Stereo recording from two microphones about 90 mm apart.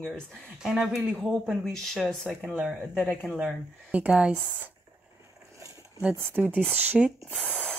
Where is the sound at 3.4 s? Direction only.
15° right (ahead or behind).